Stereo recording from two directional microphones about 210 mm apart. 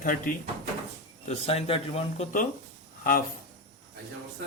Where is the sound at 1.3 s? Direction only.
30° left (ahead or behind).